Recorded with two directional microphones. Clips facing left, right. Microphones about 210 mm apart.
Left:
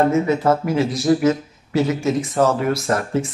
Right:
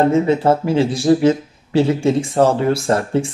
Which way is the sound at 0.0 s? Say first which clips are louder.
Right 3 dB; 30° right (ahead or behind).